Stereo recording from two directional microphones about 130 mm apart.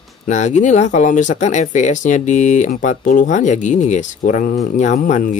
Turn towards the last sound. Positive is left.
turn(degrees=80)